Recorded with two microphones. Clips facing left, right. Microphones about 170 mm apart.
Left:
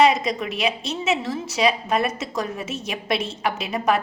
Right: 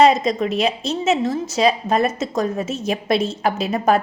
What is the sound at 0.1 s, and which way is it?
A woman's voice, 35° right (ahead or behind).